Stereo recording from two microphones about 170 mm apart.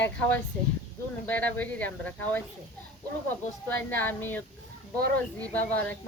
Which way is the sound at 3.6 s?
10° left (ahead or behind).